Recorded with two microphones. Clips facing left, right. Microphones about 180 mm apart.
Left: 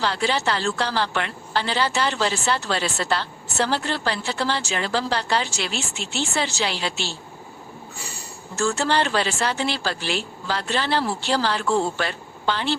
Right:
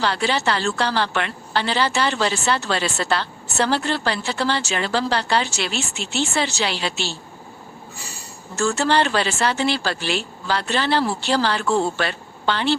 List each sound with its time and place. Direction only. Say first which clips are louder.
0.0 s a woman's voice: right 2 dB; 70° right (ahead or behind)
8.5 s a woman's voice: right 2 dB; 75° right (ahead or behind)